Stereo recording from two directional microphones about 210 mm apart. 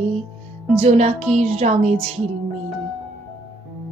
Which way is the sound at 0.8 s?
30° right (ahead or behind).